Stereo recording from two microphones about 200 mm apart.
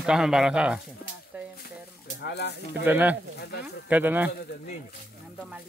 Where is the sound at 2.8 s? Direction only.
10° right (ahead or behind).